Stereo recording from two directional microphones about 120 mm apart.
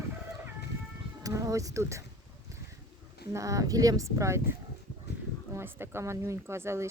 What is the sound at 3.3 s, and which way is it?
A woman's voice, 25° right (ahead or behind).